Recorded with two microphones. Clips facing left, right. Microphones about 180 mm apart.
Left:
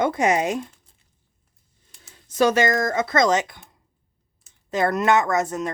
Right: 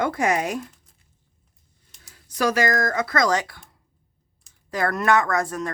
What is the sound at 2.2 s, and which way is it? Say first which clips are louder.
Speech: left 3 dB; 25° left (ahead or behind).